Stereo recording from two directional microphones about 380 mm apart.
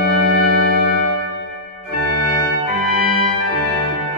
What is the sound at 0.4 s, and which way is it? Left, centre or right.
Music, right.